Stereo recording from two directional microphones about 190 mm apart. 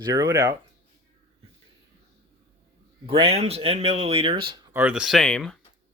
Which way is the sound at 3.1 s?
30° right (ahead or behind).